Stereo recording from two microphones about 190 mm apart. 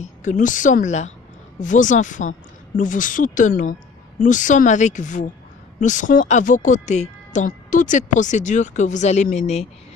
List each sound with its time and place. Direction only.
0.2 s speech: 40° left (ahead or behind)